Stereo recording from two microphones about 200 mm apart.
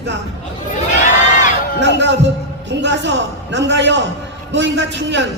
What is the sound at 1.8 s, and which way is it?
Speech, 60° right (ahead or behind).